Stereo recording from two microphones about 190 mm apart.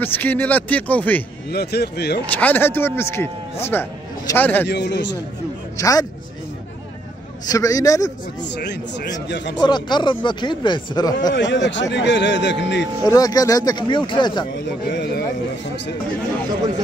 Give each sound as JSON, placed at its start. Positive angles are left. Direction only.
{"t": 0.0, "sound": "a man's voice", "side_deg": 10}
{"t": 1.5, "sound": "speech", "side_deg": 60}
{"t": 2.3, "sound": "a man's voice", "side_deg": 10}
{"t": 4.6, "sound": "speech", "side_deg": 65}
{"t": 5.8, "sound": "a man's voice", "side_deg": 20}
{"t": 7.4, "sound": "a man's voice", "side_deg": 20}
{"t": 8.5, "sound": "a man's voice", "side_deg": 60}
{"t": 9.6, "sound": "speech", "side_deg": 25}
{"t": 11.3, "sound": "a man's voice", "side_deg": 70}
{"t": 13.0, "sound": "speech", "side_deg": 20}
{"t": 14.9, "sound": "speech", "side_deg": 60}